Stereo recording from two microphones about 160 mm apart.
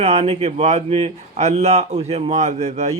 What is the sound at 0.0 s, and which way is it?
Speech, 40° right (ahead or behind).